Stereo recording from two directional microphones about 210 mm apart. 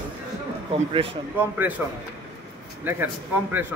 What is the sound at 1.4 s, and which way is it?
Speech, 10° right (ahead or behind).